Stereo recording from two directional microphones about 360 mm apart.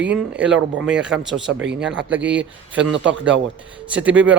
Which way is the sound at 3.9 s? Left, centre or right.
Centre.